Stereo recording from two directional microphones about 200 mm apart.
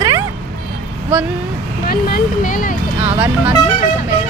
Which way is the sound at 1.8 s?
45° left (ahead or behind).